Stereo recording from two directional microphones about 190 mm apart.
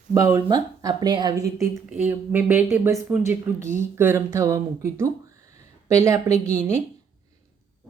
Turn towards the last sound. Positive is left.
turn(degrees=-15)  # may be behind; listen again after turning